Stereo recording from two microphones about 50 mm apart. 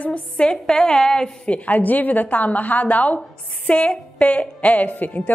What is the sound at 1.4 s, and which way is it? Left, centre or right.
A woman's voice, left.